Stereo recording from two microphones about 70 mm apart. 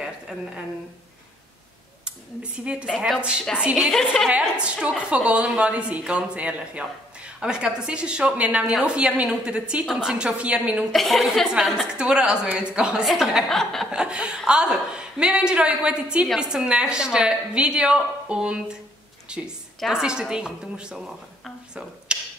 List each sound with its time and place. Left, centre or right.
0.0 s a sound: centre
2.0 s a woman's voice: centre
3.8 s a woman's voice: centre
4.4 s a woman's voice: centre
10.9 s a woman's voice: centre
11.9 s a woman's voice: centre
13.5 s a woman's voice: centre
13.9 s a woman's voice: centre
21.7 s a sound: centre